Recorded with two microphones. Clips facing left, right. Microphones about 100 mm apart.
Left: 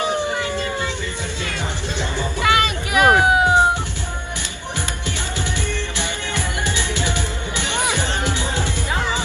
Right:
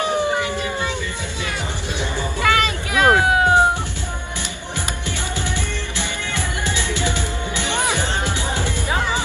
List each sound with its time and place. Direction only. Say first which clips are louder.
0.4 s howl: even; 15° right (ahead or behind)
2.4 s meow: even; 20° left (ahead or behind)
6.6 s music: right 2 dB; 20° left (ahead or behind)
8.4 s music: even; 20° left (ahead or behind)